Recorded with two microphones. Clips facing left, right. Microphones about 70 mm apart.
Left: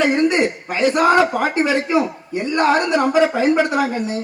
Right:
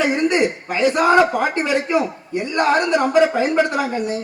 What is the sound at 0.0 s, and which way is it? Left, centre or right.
A man's voice, centre.